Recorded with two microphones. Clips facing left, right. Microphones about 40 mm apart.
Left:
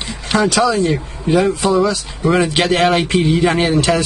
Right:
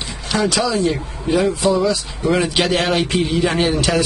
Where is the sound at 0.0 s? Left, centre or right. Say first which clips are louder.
Left 4 dB; left.